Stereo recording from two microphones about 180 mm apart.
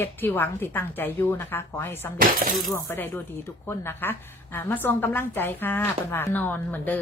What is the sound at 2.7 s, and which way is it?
A woman's voice, 15° left (ahead or behind).